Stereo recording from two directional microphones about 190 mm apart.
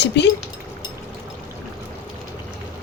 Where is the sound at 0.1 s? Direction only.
60° left (ahead or behind).